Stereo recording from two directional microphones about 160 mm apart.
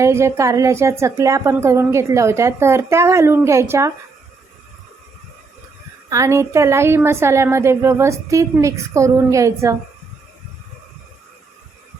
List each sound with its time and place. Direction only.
0.0 s a woman's voice: 15° right (ahead or behind)
6.1 s a woman's voice: 20° right (ahead or behind)